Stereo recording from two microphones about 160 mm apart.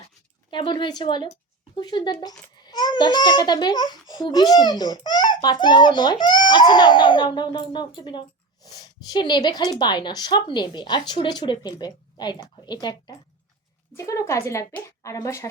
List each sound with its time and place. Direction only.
0.5 s a child's voice: 30° left (ahead or behind)